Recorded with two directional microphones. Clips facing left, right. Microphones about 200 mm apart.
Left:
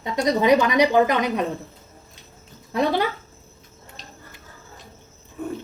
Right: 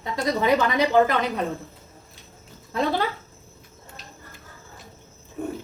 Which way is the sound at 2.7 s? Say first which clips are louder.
Left 3 dB; 15° left (ahead or behind).